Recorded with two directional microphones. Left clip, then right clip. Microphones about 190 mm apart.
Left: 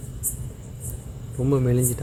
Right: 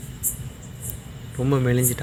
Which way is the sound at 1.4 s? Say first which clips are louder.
Even; 5° left (ahead or behind).